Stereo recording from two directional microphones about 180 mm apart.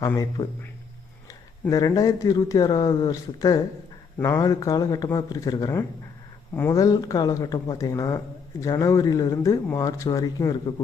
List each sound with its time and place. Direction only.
0.0 s speech: 20° left (ahead or behind)